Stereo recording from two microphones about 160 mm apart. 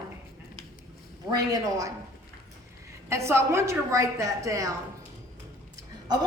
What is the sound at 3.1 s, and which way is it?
A woman's voice, 15° right (ahead or behind).